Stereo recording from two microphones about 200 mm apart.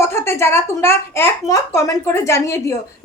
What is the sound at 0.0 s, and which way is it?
A woman's voice, 15° left (ahead or behind).